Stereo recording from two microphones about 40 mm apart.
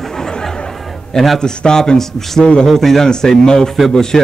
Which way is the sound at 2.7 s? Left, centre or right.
Centre.